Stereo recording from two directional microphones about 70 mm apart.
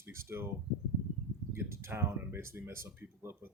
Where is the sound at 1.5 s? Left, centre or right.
Right.